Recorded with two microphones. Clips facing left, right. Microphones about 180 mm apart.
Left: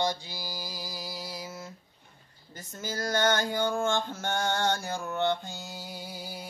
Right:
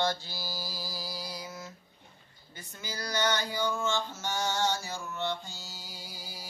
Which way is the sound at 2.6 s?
45° left (ahead or behind).